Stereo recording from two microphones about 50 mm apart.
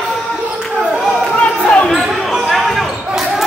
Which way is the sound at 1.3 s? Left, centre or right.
Left.